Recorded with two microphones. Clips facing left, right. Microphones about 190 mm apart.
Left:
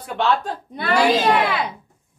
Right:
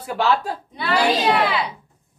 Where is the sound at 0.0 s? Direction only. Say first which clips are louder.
Even; 5° right (ahead or behind).